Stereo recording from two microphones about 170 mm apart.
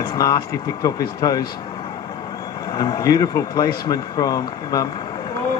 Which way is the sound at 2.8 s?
20° left (ahead or behind).